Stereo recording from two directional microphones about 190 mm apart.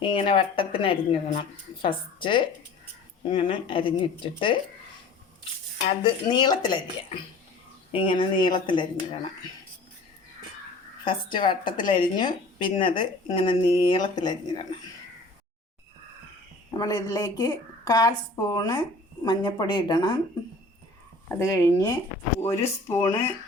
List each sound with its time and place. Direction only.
0.0 s a woman's voice: 25° left (ahead or behind)
6.0 s a woman's voice: 25° left (ahead or behind)
7.9 s a woman's voice: 25° left (ahead or behind)
11.0 s a woman's voice: 25° left (ahead or behind)
16.7 s a woman's voice: 20° left (ahead or behind)
21.2 s speech: 15° left (ahead or behind)